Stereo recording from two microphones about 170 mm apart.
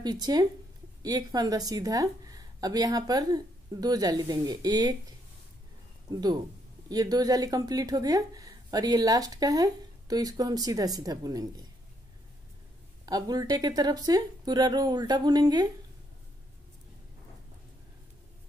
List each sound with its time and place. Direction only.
0.0 s speech: 25° right (ahead or behind)
6.1 s speech: 25° right (ahead or behind)
13.0 s speech: 20° right (ahead or behind)